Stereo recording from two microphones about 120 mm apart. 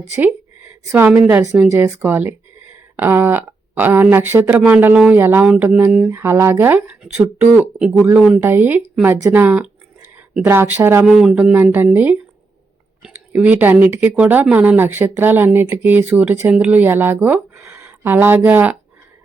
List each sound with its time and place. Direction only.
0.9 s speech: 20° right (ahead or behind)
8.4 s speech: 20° right (ahead or behind)
11.0 s speech: 5° right (ahead or behind)